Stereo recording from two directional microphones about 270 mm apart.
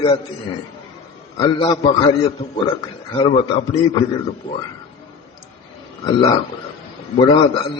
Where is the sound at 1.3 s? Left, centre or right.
Centre.